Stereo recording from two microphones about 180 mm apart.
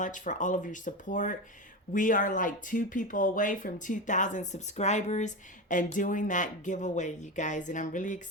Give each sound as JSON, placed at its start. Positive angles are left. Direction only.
{"t": 0.0, "sound": "speech", "side_deg": 45}